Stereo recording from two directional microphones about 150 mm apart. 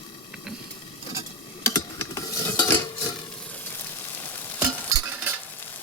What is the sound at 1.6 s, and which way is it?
Stir, 20° left (ahead or behind).